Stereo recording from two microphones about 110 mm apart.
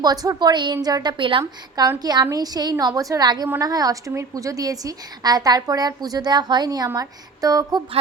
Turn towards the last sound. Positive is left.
turn(degrees=-35)  # may be behind; listen again after turning